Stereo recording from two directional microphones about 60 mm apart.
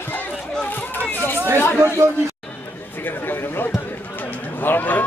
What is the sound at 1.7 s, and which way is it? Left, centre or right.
Speech, right.